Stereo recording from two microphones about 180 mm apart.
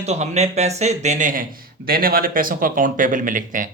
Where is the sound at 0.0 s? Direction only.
35° right (ahead or behind).